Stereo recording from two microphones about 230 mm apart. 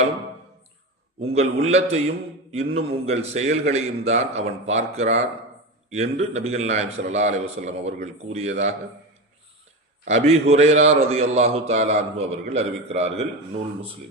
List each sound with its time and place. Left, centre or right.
1.3 s a man's voice: right
10.1 s a man's voice: right